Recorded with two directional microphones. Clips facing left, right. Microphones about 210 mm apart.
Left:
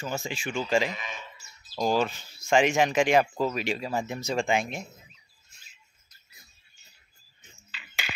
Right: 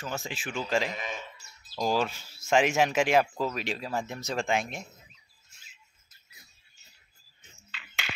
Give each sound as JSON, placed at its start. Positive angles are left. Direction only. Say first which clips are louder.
{"t": 0.0, "sound": "speech", "louder": "left 3 dB", "side_deg": 0}
{"t": 0.9, "sound": "a man's voice", "louder": "right 3 dB", "side_deg": -45}
{"t": 1.8, "sound": "speech", "louder": "left 2 dB", "side_deg": 0}
{"t": 7.7, "sound": "a sound", "louder": "even", "side_deg": 0}